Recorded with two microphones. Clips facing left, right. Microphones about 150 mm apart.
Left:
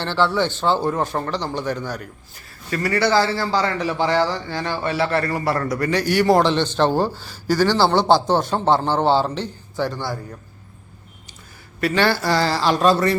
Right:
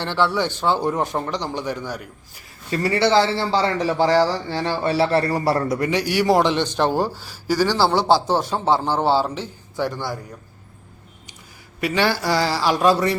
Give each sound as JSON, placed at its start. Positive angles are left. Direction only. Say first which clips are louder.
{"t": 0.0, "sound": "a man's voice", "louder": "left 1 dB", "side_deg": -15}
{"t": 2.6, "sound": "a man's voice", "louder": "right 1 dB", "side_deg": -25}
{"t": 5.9, "sound": "a man's voice", "louder": "left 3 dB", "side_deg": -10}
{"t": 11.8, "sound": "a man's voice", "louder": "left 2 dB", "side_deg": -10}